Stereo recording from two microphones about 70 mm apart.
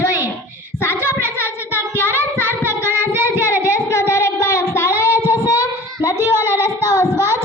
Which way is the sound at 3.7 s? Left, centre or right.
Left.